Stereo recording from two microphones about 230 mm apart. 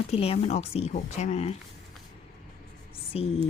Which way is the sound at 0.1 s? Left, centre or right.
Left.